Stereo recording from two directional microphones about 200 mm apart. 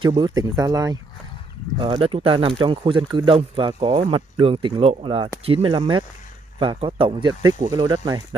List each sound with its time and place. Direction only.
0.0 s speech: 20° right (ahead or behind)